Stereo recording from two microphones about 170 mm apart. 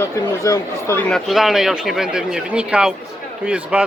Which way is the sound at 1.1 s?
Centre (ahead or behind).